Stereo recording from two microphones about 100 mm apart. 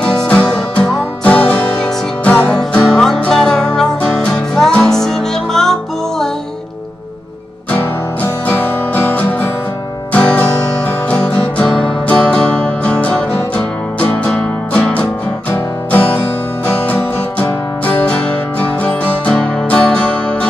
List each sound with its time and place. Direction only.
0.0 s music: 10° left (ahead or behind)
7.7 s music: 15° left (ahead or behind)